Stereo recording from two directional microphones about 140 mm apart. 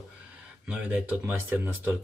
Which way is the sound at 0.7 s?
10° right (ahead or behind).